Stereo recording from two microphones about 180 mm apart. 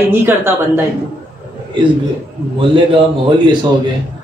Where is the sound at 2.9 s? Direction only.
30° right (ahead or behind).